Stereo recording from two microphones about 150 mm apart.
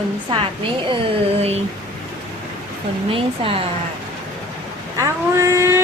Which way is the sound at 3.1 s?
40° right (ahead or behind).